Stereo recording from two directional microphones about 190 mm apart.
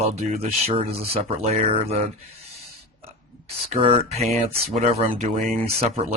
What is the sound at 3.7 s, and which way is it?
Speech, 30° right (ahead or behind).